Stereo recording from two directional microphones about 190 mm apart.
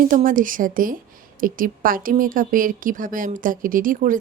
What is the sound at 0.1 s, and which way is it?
Speech, 45° right (ahead or behind).